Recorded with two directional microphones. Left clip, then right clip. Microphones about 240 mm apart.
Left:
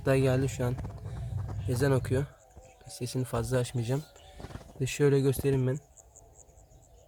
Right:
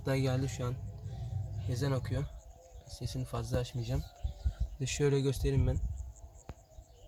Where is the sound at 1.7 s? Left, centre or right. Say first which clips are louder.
Left 9 dB; left.